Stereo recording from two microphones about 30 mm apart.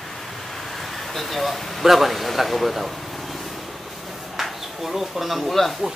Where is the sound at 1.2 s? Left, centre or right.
Centre.